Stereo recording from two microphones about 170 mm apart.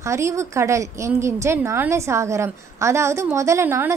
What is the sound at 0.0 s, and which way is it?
A woman's voice, 15° right (ahead or behind).